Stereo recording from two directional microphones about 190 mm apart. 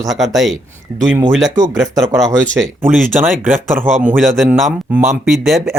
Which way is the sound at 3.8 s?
10° right (ahead or behind).